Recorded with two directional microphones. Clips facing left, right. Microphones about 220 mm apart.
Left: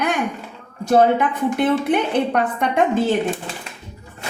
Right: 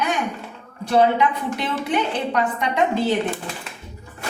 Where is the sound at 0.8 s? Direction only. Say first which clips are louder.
Left 2 dB; 45° left (ahead or behind).